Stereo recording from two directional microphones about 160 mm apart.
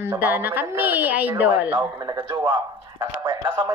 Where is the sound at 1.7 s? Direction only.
25° right (ahead or behind).